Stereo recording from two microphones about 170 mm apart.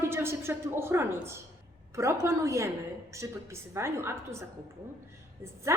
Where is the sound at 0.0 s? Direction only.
15° right (ahead or behind).